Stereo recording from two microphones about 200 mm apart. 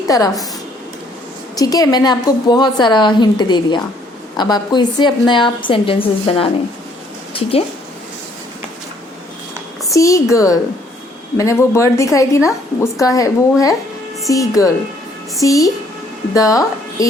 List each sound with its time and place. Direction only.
0.1 s a woman's voice: 15° left (ahead or behind)
1.5 s a woman's voice: 20° left (ahead or behind)
9.9 s a woman's voice: 15° left (ahead or behind)